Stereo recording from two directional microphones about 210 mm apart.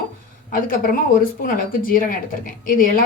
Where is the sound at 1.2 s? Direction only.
40° left (ahead or behind).